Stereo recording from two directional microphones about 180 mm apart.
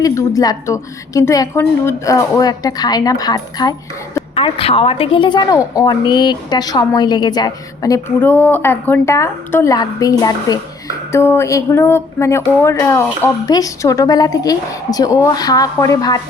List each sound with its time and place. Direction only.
0.0 s a woman's voice: 20° left (ahead or behind)